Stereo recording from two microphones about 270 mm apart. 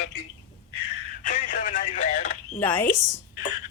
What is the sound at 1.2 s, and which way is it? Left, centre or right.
Radio, left.